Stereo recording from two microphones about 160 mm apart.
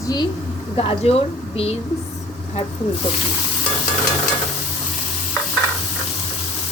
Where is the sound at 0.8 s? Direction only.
40° left (ahead or behind).